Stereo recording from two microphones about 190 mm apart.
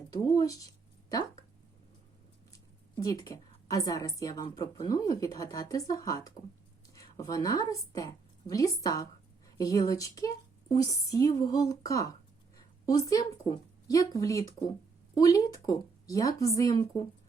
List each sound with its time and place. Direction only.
0.1 s speech: 15° left (ahead or behind)
2.5 s a woman's voice: 15° left (ahead or behind)